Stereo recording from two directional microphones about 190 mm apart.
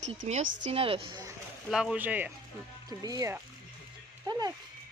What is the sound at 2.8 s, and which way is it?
Speech, 20° right (ahead or behind).